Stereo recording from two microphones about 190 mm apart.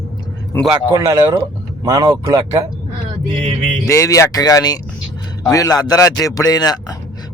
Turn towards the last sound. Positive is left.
turn(degrees=20)  # may be behind; listen again after turning